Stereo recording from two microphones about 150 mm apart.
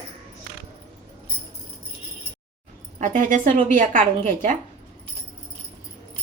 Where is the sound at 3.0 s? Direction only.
60° right (ahead or behind).